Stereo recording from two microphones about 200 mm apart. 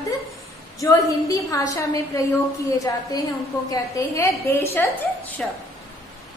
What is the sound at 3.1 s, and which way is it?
A woman's voice, 20° left (ahead or behind).